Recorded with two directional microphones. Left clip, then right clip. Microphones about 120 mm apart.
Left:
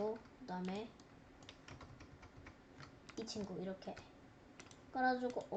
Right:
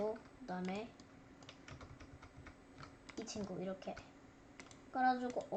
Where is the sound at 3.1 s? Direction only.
5° right (ahead or behind).